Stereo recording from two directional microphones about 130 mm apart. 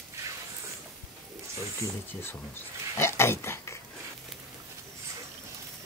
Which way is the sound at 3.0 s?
20° left (ahead or behind).